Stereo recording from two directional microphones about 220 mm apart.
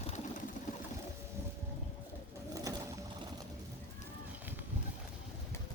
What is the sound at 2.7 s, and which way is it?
Boat, 15° right (ahead or behind).